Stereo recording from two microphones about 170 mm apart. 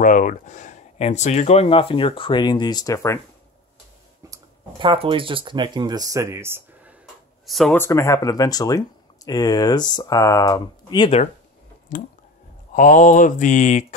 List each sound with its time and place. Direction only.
0.0 s speech: 50° left (ahead or behind); by 3.2 s 20° left (ahead or behind)
4.3 s speech: 30° right (ahead or behind); by 7.0 s 10° right (ahead or behind)
7.4 s speech: centre (ahead or behind)
7.7 s speech: 15° left (ahead or behind)
11.9 s speech: 50° left (ahead or behind)